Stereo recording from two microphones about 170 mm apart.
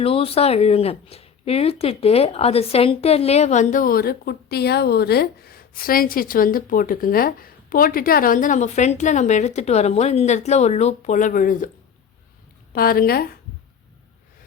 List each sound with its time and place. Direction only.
0.0 s speech: 35° left (ahead or behind); by 11.7 s 50° left (ahead or behind)
12.7 s speech: 60° left (ahead or behind)